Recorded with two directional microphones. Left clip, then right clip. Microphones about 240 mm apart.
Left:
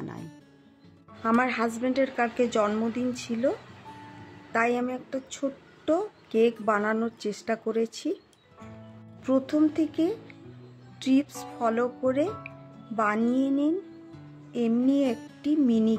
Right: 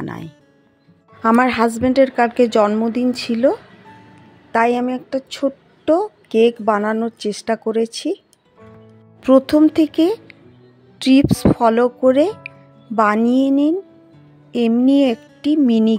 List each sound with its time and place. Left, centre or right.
0.0 s music: right
1.2 s a woman's voice: right
9.2 s speech: right